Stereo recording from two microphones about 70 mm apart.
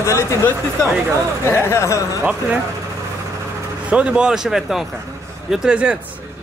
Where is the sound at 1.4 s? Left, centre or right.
Left.